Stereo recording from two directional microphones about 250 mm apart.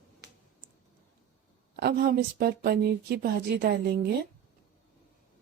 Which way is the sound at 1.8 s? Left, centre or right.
Right.